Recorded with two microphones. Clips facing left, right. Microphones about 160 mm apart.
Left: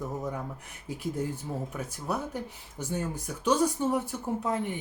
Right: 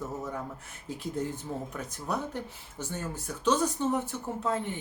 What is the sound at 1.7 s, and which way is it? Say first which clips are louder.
Speech: left 1 dB; 10° left (ahead or behind).